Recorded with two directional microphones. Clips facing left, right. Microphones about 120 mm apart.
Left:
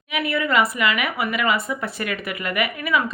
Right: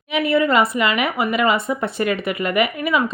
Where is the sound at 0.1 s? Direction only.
25° right (ahead or behind).